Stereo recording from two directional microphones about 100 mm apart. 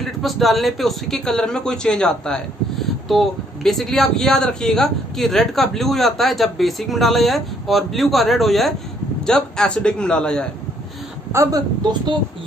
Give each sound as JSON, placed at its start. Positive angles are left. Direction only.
{"t": 0.0, "sound": "a man's voice", "side_deg": 0}
{"t": 11.3, "sound": "speech", "side_deg": -25}